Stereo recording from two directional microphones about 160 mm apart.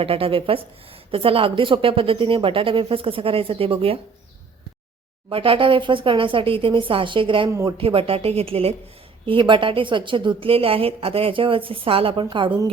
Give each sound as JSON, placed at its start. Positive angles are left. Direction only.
{"t": 0.0, "sound": "a woman's voice", "side_deg": -35}
{"t": 5.3, "sound": "a woman's voice", "side_deg": -35}